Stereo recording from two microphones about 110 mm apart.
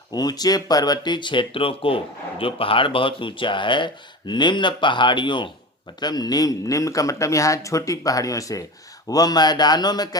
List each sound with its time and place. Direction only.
0.1 s speech: 35° left (ahead or behind)